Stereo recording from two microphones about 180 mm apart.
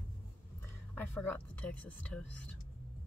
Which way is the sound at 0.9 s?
10° left (ahead or behind).